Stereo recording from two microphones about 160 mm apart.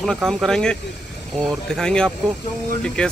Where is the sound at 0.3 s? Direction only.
Centre (ahead or behind).